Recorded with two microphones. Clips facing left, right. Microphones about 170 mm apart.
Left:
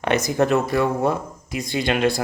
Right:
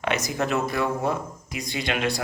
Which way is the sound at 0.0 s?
50° left (ahead or behind).